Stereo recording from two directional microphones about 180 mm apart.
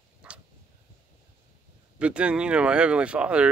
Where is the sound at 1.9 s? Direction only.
5° right (ahead or behind).